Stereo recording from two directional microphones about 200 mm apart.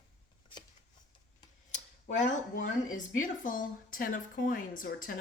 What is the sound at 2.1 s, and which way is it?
Speech, 35° left (ahead or behind).